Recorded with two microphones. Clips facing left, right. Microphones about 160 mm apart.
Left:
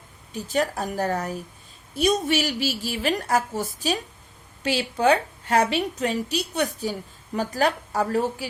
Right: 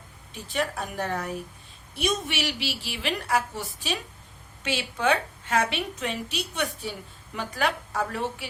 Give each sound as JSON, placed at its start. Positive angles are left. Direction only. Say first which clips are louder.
{"t": 0.3, "sound": "a woman's voice", "louder": "left 5 dB", "side_deg": 40}